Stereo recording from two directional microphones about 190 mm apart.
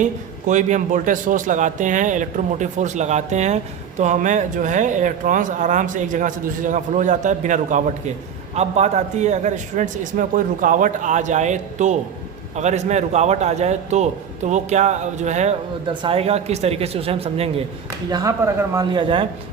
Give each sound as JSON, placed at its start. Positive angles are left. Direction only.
{"t": 0.0, "sound": "a man's voice", "side_deg": -40}
{"t": 18.1, "sound": "speech", "side_deg": -20}